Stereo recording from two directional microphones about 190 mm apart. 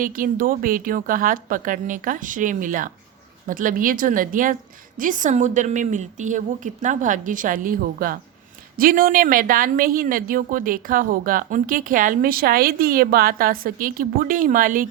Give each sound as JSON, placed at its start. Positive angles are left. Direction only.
{"t": 0.0, "sound": "a woman's voice", "side_deg": -45}